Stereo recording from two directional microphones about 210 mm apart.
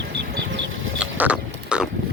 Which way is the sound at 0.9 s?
5° right (ahead or behind).